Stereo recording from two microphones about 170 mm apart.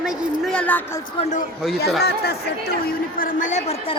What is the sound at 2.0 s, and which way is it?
A woman's voice, 70° left (ahead or behind).